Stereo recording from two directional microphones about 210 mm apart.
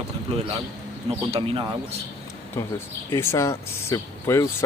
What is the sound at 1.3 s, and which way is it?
Speech, 25° right (ahead or behind).